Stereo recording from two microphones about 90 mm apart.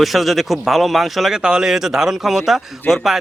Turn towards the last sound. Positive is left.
turn(degrees=-5)  # may be behind; listen again after turning